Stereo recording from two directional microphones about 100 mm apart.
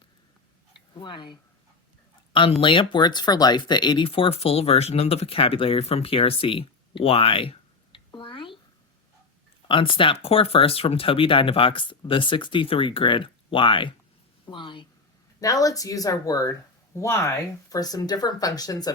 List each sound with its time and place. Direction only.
0.9 s speech: 55° left (ahead or behind)
2.6 s speech: 55° left (ahead or behind)
7.9 s a sound: 55° left (ahead or behind)
9.6 s a woman's voice: 60° left (ahead or behind)
15.4 s speech: 35° left (ahead or behind)
16.9 s speech: 25° left (ahead or behind)